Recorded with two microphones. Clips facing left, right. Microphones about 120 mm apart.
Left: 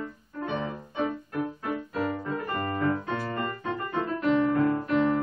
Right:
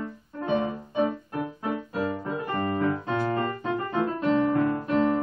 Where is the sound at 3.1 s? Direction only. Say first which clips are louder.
Right 5 dB; 40° right (ahead or behind).